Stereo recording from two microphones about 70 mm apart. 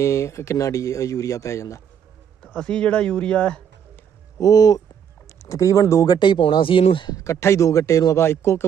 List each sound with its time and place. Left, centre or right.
0.0 s speech: left
2.4 s speech: centre
4.4 s speech: left
5.4 s speech: left
6.0 s speech: left
7.1 s speech: left
8.1 s speech: left